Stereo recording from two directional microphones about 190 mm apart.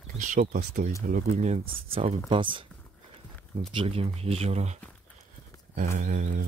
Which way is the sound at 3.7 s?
30° right (ahead or behind).